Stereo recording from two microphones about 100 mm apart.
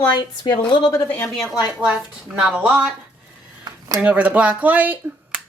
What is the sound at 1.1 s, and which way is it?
Speech, 25° left (ahead or behind).